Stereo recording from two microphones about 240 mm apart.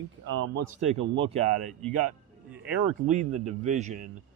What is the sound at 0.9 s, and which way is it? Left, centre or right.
Speech, right.